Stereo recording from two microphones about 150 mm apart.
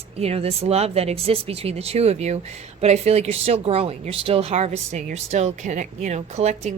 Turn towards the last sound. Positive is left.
turn(degrees=-45)  # may be behind; listen again after turning